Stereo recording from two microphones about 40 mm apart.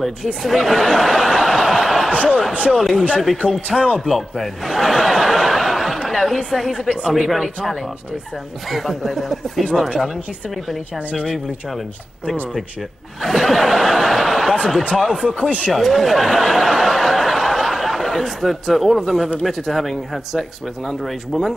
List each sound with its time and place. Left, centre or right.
0.0 s speech: centre
3.4 s speech: left
4.0 s speech: centre
13.2 s a sound: centre
15.0 s speech: centre
15.7 s a sound: centre
19.4 s speech: centre